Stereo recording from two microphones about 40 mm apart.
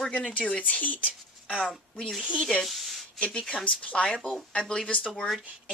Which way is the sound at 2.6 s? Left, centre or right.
Centre.